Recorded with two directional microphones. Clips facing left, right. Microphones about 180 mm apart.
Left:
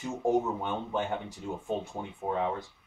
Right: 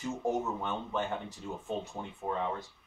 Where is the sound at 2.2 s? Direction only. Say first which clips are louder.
Left 4 dB; 15° left (ahead or behind).